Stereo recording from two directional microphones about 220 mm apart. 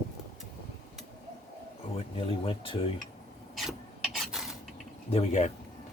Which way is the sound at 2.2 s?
25° left (ahead or behind).